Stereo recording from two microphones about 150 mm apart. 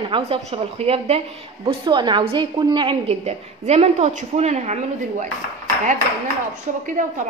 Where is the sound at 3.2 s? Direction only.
45° right (ahead or behind).